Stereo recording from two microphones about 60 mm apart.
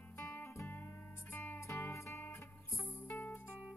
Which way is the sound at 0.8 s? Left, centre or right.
Left.